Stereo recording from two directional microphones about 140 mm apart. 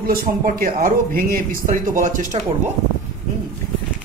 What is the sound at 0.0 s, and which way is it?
Speech, 90° right.